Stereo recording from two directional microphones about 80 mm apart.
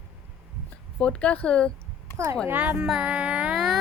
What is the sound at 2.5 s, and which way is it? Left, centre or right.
Music, centre.